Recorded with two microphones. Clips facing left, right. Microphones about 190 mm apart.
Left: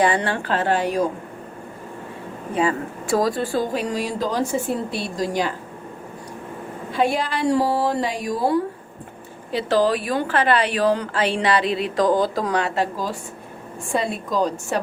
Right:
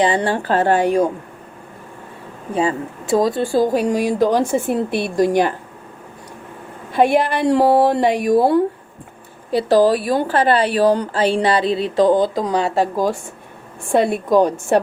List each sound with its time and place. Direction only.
0.0 s a woman's voice: 30° right (ahead or behind)
0.5 s speech: 50° right (ahead or behind)
2.6 s speech: 25° right (ahead or behind); by 5.5 s 55° right (ahead or behind)
6.9 s speech: 55° right (ahead or behind)
9.5 s a woman's voice: 40° right (ahead or behind)
13.9 s speech: 60° right (ahead or behind)